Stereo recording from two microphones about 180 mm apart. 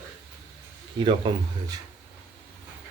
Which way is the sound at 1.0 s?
25° right (ahead or behind).